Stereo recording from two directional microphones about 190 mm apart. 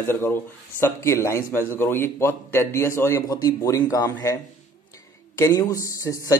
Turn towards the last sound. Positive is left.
turn(degrees=15)  # may be behind; listen again after turning